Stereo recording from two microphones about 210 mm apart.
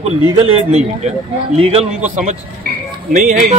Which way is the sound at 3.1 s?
35° right (ahead or behind).